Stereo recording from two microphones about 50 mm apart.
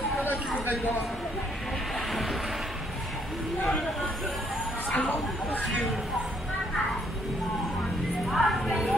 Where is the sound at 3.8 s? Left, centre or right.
Centre.